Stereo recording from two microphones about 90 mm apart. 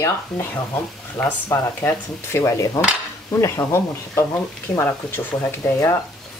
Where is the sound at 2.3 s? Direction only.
35° left (ahead or behind).